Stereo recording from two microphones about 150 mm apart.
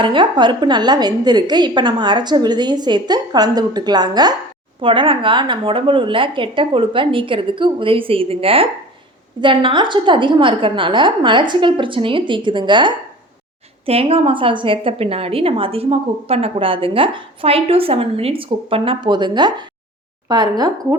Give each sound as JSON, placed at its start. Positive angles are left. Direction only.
{"t": 0.0, "sound": "a woman's voice", "side_deg": -30}